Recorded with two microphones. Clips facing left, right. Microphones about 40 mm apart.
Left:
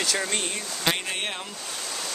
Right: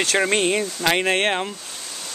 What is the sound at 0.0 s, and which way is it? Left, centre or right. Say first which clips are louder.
Speech: right 7 dB; right.